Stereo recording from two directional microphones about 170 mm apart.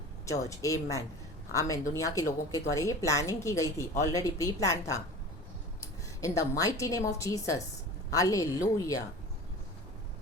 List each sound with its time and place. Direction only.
0.3 s a woman's voice: 20° left (ahead or behind)